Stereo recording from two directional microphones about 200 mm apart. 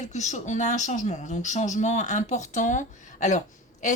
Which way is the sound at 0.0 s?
35° left (ahead or behind).